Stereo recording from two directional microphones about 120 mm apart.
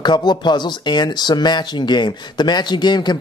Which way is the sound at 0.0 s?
40° left (ahead or behind).